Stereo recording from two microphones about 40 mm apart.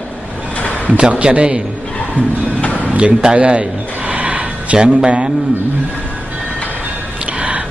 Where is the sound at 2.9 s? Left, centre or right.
Right.